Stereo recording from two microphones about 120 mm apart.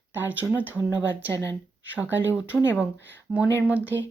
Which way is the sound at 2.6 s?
20° left (ahead or behind).